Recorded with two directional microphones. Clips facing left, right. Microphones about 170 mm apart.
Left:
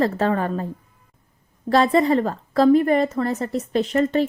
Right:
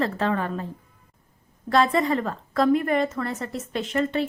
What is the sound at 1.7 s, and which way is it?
A woman's voice, 35° left (ahead or behind).